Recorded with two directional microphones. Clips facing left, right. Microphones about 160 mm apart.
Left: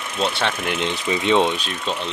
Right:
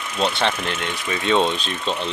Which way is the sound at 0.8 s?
20° left (ahead or behind).